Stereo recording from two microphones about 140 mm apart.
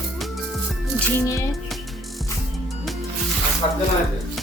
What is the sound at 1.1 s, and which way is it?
Music, 20° left (ahead or behind).